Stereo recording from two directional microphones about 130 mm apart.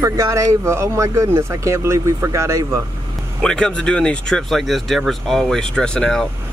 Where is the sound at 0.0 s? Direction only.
25° right (ahead or behind).